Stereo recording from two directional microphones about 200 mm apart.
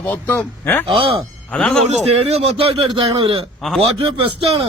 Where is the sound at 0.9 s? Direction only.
25° right (ahead or behind).